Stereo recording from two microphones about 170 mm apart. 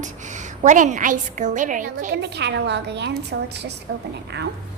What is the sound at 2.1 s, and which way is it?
A woman's voice, 80° right.